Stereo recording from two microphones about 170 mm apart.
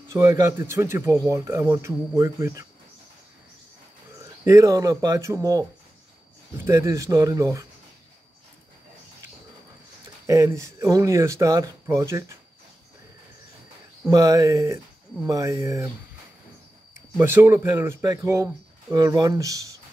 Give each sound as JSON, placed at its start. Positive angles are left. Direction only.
{"t": 0.1, "sound": "speech", "side_deg": -15}
{"t": 4.5, "sound": "speech", "side_deg": -20}
{"t": 10.2, "sound": "speech", "side_deg": -15}
{"t": 14.0, "sound": "speech", "side_deg": -20}
{"t": 16.9, "sound": "speech", "side_deg": -15}